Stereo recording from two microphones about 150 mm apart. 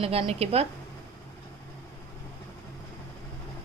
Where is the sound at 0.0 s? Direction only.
40° right (ahead or behind).